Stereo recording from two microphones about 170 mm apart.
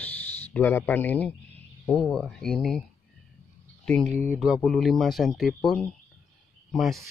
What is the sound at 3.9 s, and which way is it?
Speech, 5° left (ahead or behind).